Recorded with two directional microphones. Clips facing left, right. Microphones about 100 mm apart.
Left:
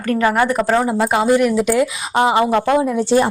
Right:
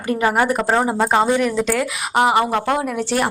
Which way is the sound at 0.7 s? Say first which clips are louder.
Left 2 dB; 20° right (ahead or behind).